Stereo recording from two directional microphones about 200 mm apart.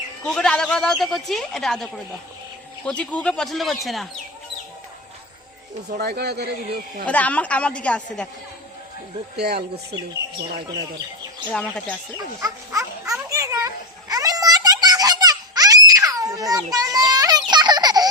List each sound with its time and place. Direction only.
0.3 s speech: 5° left (ahead or behind)
6.0 s speech: 55° right (ahead or behind)
7.1 s a woman's voice: 5° left (ahead or behind)
9.4 s speech: 55° right (ahead or behind)
11.5 s speech: 5° left (ahead or behind)
12.1 s speech: 15° right (ahead or behind)
13.3 s children playing: 15° right (ahead or behind)
14.1 s a sound: 20° right (ahead or behind)
17.5 s baby laughter: 20° right (ahead or behind)